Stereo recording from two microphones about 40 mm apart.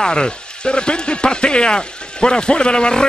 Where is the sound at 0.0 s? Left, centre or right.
Left.